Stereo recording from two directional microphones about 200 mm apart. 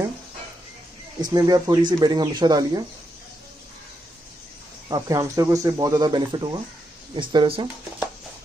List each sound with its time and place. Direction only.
1.3 s speech: 20° right (ahead or behind)
4.8 s speech: 20° right (ahead or behind)